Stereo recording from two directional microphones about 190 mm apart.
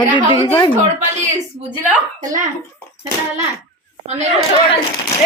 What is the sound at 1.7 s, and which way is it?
Speech, 5° right (ahead or behind).